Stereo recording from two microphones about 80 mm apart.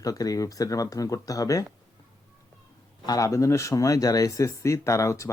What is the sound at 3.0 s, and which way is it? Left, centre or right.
Speech, left.